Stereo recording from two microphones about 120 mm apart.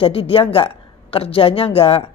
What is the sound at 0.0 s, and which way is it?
A woman's voice, 50° left (ahead or behind).